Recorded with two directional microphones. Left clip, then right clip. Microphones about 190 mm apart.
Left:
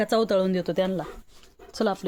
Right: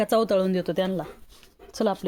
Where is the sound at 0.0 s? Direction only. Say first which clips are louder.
Right 1 dB; 10° right (ahead or behind).